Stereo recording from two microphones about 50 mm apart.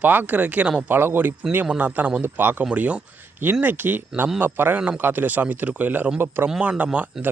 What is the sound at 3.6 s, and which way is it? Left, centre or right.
Speech, right.